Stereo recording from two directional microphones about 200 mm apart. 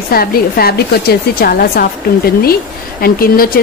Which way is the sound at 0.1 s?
50° left (ahead or behind).